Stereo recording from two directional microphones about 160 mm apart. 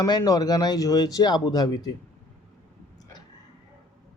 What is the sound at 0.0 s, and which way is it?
Speech, 25° left (ahead or behind).